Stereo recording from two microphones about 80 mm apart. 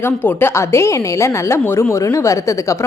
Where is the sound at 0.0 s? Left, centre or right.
Left.